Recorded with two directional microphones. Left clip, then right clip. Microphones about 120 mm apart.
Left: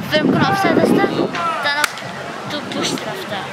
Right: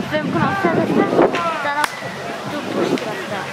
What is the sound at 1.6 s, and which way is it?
Chop, 50° left (ahead or behind).